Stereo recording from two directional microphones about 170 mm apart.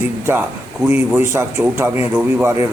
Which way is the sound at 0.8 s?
15° right (ahead or behind).